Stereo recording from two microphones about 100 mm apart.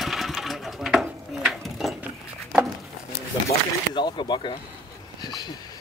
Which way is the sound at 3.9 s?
50° left (ahead or behind).